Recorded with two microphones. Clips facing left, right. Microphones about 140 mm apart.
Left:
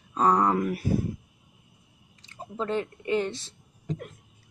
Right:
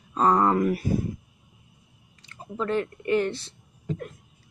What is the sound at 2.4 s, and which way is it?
Speech, 25° left (ahead or behind).